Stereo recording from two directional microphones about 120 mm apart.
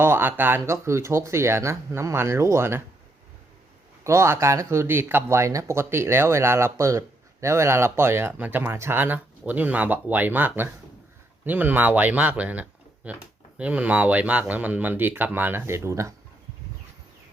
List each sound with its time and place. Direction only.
0.0 s speech: 20° right (ahead or behind)
4.0 s speech: 25° right (ahead or behind)